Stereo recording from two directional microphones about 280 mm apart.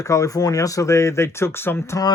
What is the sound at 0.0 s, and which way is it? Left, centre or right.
Speech, centre.